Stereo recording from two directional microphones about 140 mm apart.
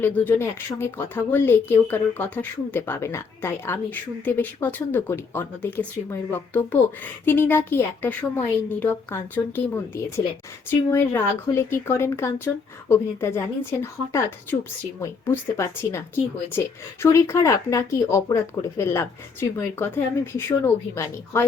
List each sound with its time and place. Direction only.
0.0 s speech: 15° left (ahead or behind)